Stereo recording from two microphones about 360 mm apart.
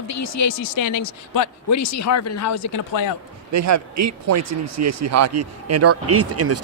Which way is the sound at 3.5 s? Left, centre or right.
Right.